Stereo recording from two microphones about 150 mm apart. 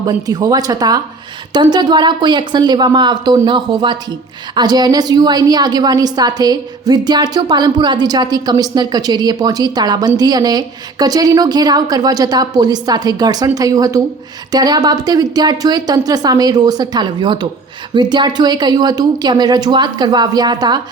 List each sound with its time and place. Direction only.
0.0 s a woman's voice: 25° right (ahead or behind)